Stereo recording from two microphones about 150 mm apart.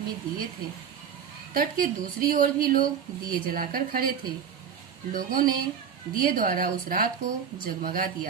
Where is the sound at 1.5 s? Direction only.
75° right (ahead or behind).